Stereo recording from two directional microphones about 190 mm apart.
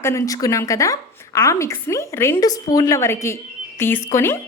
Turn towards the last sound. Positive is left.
turn(degrees=15)  # may be behind; listen again after turning